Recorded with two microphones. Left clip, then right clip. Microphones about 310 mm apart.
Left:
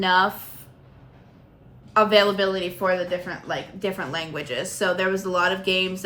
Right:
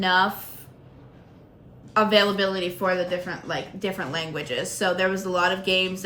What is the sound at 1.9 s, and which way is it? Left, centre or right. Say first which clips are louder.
A woman's voice: left 2 dB; centre.